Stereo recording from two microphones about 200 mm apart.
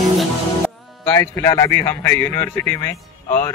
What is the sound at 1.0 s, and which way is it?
Speech, 15° left (ahead or behind).